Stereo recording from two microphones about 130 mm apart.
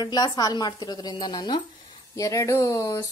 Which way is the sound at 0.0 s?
30° left (ahead or behind).